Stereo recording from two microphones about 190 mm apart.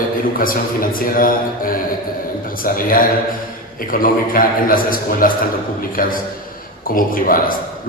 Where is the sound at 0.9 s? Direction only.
50° left (ahead or behind).